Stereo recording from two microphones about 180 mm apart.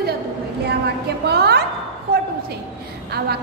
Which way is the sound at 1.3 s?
65° right (ahead or behind).